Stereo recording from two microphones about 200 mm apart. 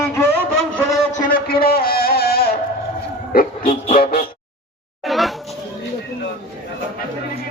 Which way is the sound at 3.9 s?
45° left (ahead or behind).